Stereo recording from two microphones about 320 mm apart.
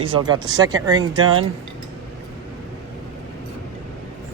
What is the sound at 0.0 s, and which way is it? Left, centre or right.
Speech, centre.